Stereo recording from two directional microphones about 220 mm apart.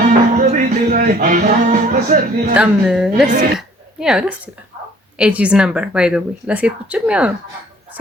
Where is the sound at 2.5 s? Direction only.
5° right (ahead or behind).